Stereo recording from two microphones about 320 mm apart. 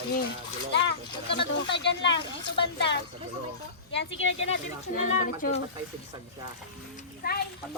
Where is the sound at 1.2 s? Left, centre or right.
Centre.